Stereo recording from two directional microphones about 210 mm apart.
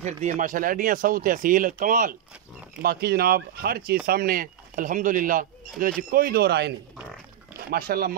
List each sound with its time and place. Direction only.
0.0 s speech: 35° right (ahead or behind)